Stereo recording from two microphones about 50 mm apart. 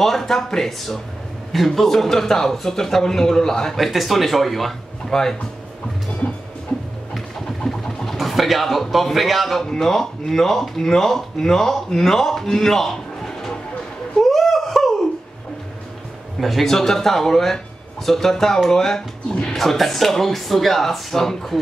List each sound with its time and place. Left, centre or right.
0.0 s speech: centre
3.7 s speech: centre
6.2 s music: left
6.7 s a sound: centre
9.7 s speech: centre
14.2 s a sound: centre
16.3 s speech: centre